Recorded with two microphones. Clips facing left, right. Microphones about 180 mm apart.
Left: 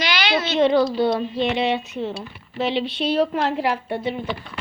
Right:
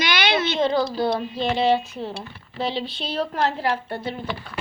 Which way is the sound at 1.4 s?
35° right (ahead or behind).